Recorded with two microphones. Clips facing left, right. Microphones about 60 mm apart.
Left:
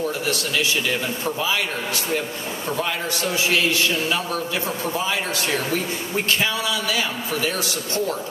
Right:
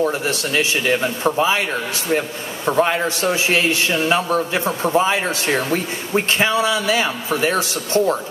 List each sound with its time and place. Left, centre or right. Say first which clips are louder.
0.3 s a man's voice: right 3 dB; right